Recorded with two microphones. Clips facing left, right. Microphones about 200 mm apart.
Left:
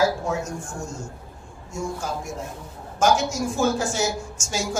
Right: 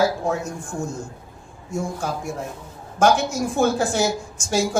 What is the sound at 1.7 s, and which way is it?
A woman's voice, 55° right (ahead or behind).